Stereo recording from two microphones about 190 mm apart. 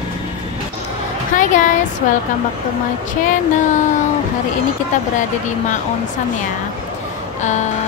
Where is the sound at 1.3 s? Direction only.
45° left (ahead or behind).